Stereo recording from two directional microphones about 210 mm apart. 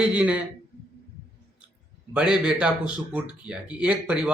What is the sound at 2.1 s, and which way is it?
A man's voice, 5° right (ahead or behind).